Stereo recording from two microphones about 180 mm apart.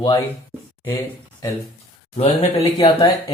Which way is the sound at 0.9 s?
20° left (ahead or behind).